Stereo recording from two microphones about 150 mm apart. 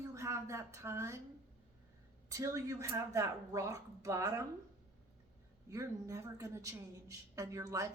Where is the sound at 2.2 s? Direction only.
20° right (ahead or behind).